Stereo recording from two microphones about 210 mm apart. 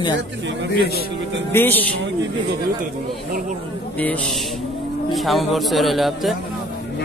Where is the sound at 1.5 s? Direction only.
10° left (ahead or behind).